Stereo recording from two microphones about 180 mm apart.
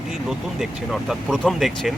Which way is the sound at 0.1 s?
Centre (ahead or behind).